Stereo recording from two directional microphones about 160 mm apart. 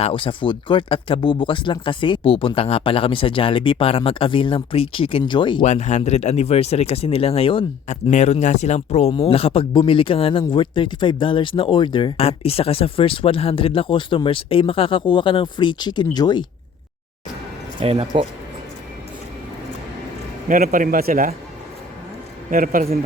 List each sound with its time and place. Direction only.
0.0 s speech: 35° left (ahead or behind)
5.6 s speech: 45° left (ahead or behind); by 16.5 s 25° left (ahead or behind)
17.7 s speech: 35° right (ahead or behind)
20.5 s speech: 65° right (ahead or behind)
22.4 s speech: 60° right (ahead or behind)